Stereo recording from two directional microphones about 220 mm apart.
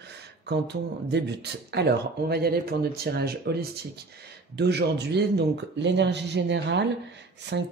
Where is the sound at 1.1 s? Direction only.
50° right (ahead or behind).